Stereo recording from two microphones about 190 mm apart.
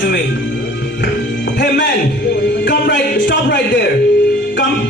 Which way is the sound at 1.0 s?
65° left (ahead or behind).